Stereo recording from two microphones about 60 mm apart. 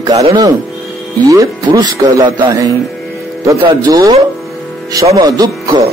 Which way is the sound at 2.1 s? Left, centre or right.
Right.